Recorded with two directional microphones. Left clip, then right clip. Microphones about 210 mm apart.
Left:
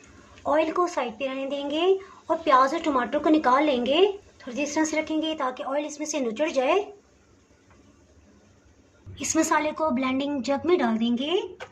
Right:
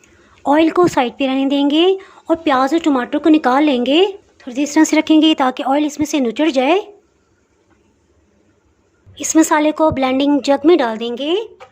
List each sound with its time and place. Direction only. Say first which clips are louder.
0.4 s speech: right 10 dB; 40° right (ahead or behind)
9.1 s a woman's voice: right 10 dB; 45° right (ahead or behind)